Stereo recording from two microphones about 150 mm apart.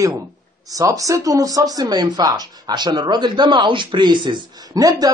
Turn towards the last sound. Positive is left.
turn(degrees=-25)  # may be behind; listen again after turning